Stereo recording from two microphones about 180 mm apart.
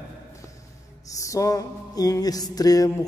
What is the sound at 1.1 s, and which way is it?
Music, 20° left (ahead or behind).